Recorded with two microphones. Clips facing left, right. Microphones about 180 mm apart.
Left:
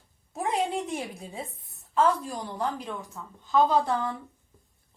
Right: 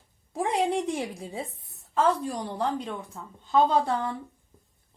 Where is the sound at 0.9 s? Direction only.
30° right (ahead or behind).